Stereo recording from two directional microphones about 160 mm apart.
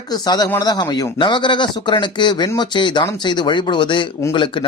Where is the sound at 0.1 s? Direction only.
25° left (ahead or behind).